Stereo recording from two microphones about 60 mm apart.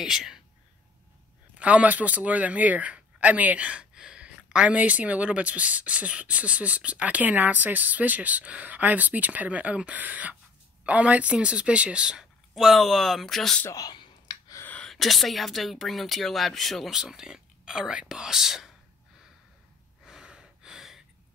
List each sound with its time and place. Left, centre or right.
0.0 s speech: centre
1.6 s speech: right; by 13.6 s centre
14.9 s speech: centre
16.9 s speech: centre
20.1 s gasp: centre